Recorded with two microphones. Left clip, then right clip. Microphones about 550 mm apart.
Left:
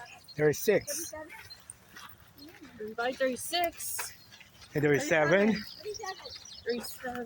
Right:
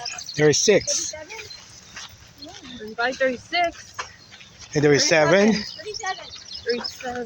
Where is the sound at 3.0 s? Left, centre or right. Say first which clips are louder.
Right 8 dB; left.